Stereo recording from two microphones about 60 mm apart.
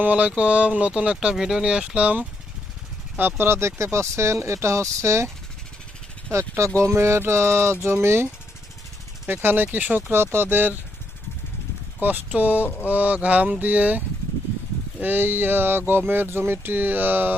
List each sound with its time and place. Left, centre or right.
0.0 s speech: right
3.2 s speech: right
6.8 s speech: right
11.9 s speech: right
12.6 s speech: left
12.9 s speech: right
15.0 s speech: right